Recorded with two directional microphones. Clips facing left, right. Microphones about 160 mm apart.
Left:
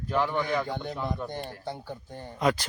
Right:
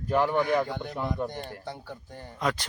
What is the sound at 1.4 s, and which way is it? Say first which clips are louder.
Speech: left 2 dB; 15° left (ahead or behind).